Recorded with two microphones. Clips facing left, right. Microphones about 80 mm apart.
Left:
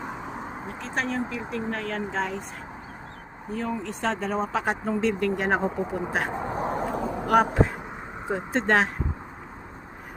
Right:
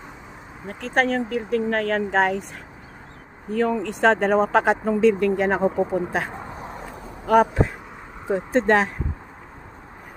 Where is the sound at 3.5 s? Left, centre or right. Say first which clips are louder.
Right 8 dB; right.